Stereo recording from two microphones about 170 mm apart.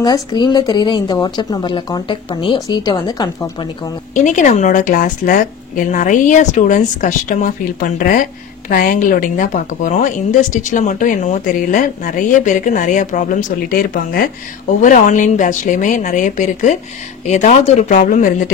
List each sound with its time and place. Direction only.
0.0 s speech: 25° left (ahead or behind)
4.1 s speech: 45° left (ahead or behind)
14.8 s speech: 50° left (ahead or behind)